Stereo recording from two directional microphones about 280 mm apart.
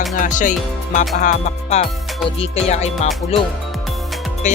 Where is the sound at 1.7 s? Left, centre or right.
Left.